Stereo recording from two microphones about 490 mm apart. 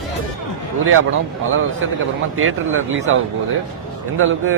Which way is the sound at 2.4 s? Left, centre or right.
Right.